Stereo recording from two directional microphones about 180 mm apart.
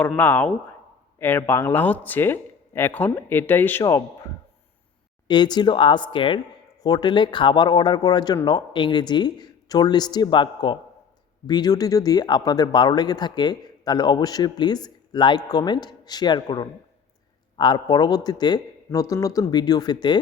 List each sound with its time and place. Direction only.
0.0 s speech: 10° left (ahead or behind)
5.3 s speech: 25° left (ahead or behind)